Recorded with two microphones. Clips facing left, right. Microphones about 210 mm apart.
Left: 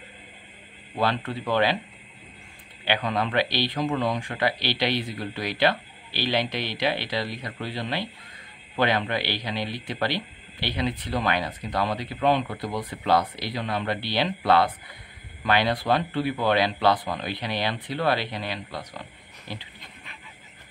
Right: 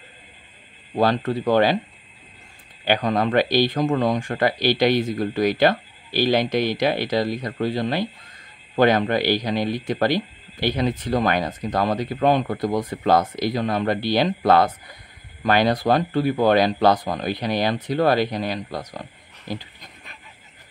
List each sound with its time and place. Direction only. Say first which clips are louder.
0.9 s speech: right 6 dB; 40° right (ahead or behind)
2.8 s speech: right 5 dB; 45° right (ahead or behind)